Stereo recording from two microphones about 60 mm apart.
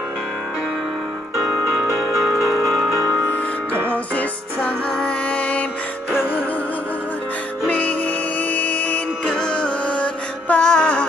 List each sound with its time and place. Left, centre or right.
2.1 s music: centre
3.3 s music: left
7.6 s music: left